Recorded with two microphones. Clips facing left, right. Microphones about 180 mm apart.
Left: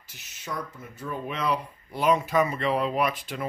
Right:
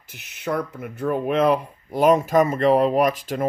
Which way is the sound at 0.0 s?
60° right (ahead or behind).